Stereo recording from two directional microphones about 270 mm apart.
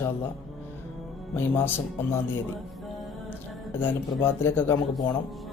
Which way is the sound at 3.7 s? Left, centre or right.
Centre.